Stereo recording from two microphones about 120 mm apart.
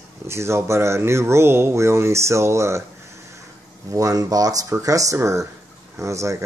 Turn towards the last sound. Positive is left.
turn(degrees=-25)  # may be behind; listen again after turning